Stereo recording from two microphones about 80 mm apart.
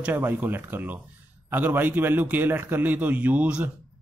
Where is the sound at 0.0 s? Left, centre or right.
Right.